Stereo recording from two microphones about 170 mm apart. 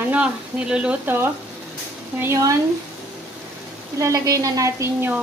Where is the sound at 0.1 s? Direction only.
5° right (ahead or behind).